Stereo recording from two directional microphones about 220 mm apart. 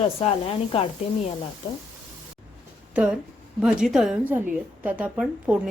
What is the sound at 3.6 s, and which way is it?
A woman's voice, centre (ahead or behind).